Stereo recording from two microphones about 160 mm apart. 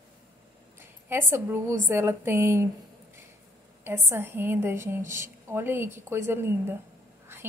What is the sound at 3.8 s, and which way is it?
Speech, 15° right (ahead or behind).